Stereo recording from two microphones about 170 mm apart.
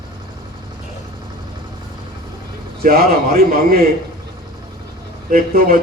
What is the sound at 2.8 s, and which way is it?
Speech, 60° right (ahead or behind).